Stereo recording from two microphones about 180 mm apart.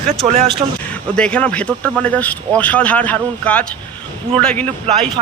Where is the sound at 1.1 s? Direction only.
5° left (ahead or behind).